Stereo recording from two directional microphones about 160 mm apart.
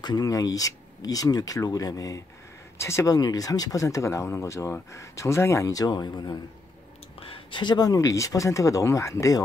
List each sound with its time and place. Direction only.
0.0 s speech: 25° left (ahead or behind)